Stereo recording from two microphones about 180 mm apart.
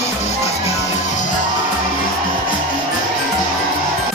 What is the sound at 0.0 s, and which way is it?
Music, 35° left (ahead or behind).